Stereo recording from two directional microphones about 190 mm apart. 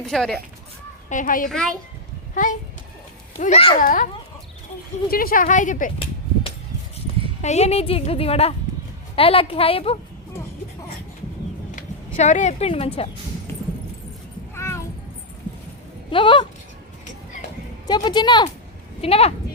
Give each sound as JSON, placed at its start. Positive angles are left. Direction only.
{"t": 0.0, "sound": "speech", "side_deg": 5}
{"t": 1.1, "sound": "speech", "side_deg": 45}
{"t": 1.5, "sound": "speech", "side_deg": 0}
{"t": 2.3, "sound": "a woman's voice", "side_deg": 40}
{"t": 3.8, "sound": "speech", "side_deg": 45}
{"t": 5.1, "sound": "speech", "side_deg": 50}
{"t": 7.4, "sound": "a woman's voice", "side_deg": 35}
{"t": 11.8, "sound": "speech", "side_deg": 40}
{"t": 14.5, "sound": "cat", "side_deg": 15}
{"t": 16.0, "sound": "speech", "side_deg": 25}
{"t": 17.8, "sound": "a woman's voice", "side_deg": 20}